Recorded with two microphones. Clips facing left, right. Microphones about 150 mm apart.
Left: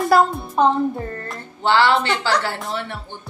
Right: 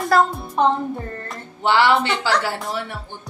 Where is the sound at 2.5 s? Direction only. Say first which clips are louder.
Even; centre (ahead or behind).